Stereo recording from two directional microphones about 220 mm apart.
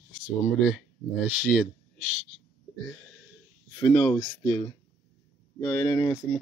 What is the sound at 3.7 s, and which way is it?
Speech, 15° left (ahead or behind).